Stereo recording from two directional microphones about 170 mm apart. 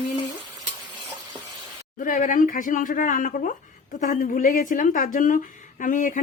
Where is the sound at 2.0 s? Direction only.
50° left (ahead or behind).